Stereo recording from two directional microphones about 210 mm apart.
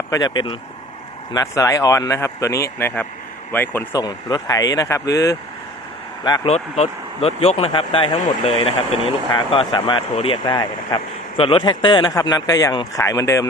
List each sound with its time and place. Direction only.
0.1 s speech: 20° left (ahead or behind)